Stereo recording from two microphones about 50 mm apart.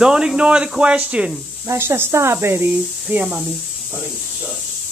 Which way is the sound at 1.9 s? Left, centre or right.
Right.